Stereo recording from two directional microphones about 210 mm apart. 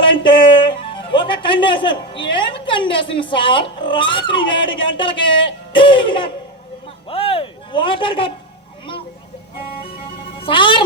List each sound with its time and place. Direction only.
0.1 s a man's voice: 25° left (ahead or behind)
5.7 s laughter: 25° left (ahead or behind)
7.1 s a sound: 25° left (ahead or behind)
10.4 s laughter: 25° left (ahead or behind)